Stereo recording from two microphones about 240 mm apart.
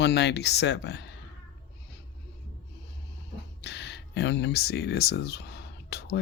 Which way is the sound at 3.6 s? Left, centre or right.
Left.